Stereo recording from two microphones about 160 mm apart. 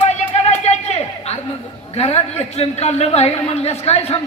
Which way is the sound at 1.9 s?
40° left (ahead or behind).